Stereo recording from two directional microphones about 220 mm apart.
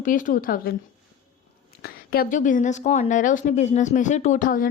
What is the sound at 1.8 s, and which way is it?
A woman's voice, 45° left (ahead or behind).